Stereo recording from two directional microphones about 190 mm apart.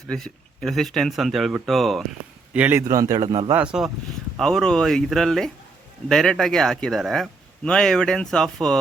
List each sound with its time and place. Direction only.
0.1 s a man's voice: centre (ahead or behind); by 3.5 s 25° right (ahead or behind)
3.5 s a man's voice: 5° right (ahead or behind)